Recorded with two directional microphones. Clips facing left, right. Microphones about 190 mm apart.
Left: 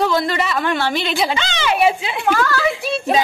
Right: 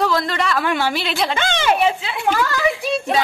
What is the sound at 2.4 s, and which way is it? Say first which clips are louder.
Speech: left 2 dB; 15° right (ahead or behind).